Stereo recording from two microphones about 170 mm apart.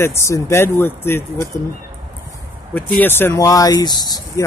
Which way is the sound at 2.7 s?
10° left (ahead or behind).